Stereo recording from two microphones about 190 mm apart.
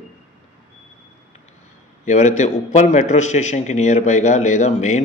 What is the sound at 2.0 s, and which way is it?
A man's voice, 40° left (ahead or behind).